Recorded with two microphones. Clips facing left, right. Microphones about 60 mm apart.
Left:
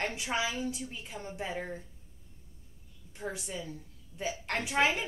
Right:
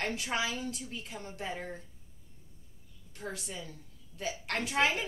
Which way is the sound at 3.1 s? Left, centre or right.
Centre.